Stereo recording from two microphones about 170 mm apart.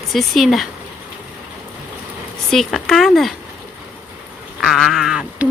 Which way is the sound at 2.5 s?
Centre (ahead or behind).